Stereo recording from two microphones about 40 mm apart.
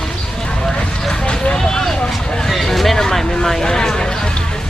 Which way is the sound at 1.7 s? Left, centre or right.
Centre.